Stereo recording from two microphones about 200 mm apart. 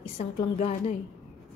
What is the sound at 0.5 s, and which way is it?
Speech, 30° left (ahead or behind).